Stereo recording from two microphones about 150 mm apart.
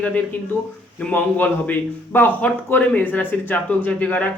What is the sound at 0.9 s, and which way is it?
A man's voice, 10° left (ahead or behind).